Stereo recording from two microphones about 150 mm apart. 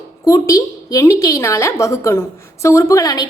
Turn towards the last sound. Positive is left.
turn(degrees=25)  # may be behind; listen again after turning